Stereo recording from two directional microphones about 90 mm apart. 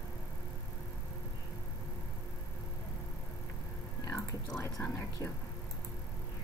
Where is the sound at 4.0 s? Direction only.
35° left (ahead or behind).